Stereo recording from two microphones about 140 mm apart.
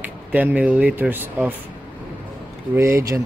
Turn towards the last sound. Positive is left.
turn(degrees=-20)  # may be behind; listen again after turning